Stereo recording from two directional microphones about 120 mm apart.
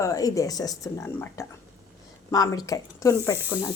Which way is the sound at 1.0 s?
20° left (ahead or behind).